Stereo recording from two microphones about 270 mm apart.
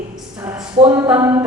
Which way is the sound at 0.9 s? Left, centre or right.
Centre.